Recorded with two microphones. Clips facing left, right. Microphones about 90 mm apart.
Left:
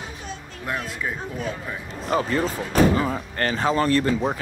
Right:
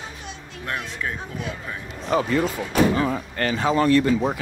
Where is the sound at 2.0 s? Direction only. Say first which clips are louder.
Right 1 dB; 40° left (ahead or behind).